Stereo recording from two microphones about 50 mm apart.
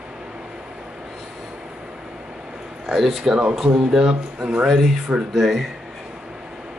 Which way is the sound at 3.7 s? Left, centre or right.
Right.